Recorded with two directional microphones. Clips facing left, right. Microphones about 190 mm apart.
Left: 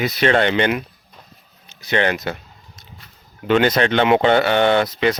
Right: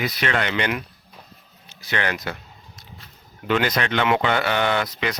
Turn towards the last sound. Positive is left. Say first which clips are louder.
# left 7 dB
turn(degrees=30)  # may be behind; listen again after turning